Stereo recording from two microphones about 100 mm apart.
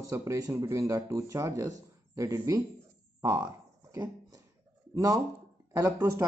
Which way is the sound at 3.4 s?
40° right (ahead or behind).